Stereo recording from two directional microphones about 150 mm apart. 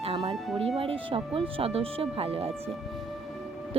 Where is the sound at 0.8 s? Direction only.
40° right (ahead or behind).